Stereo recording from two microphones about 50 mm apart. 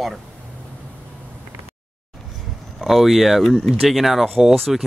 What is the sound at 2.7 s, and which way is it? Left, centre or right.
Speech, centre.